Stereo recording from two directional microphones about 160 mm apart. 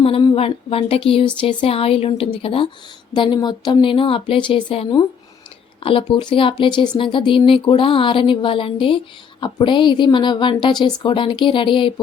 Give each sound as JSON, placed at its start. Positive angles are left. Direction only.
{"t": 0.0, "sound": "speech", "side_deg": 30}